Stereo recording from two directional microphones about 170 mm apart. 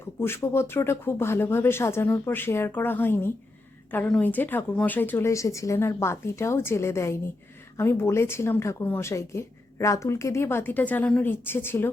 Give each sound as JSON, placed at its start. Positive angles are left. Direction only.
{"t": 0.2, "sound": "a woman's voice", "side_deg": 15}